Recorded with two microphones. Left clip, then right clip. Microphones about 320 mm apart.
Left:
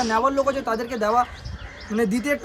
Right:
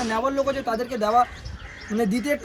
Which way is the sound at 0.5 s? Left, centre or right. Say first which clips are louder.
Left 1 dB; centre.